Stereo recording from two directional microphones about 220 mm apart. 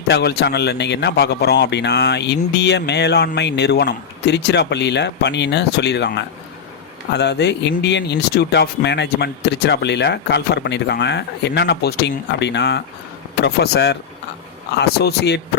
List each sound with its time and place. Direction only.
0.1 s a man's voice: 50° left (ahead or behind)